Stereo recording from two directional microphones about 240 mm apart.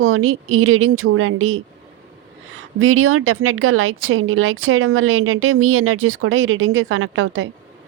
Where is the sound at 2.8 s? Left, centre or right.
Right.